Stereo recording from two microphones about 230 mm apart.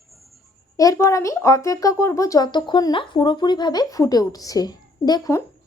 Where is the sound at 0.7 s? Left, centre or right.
Centre.